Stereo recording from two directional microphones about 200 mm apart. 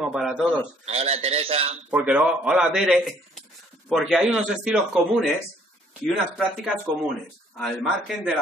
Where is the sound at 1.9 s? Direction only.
5° right (ahead or behind).